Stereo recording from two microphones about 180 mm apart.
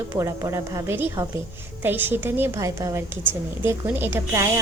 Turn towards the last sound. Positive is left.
turn(degrees=-15)  # may be behind; listen again after turning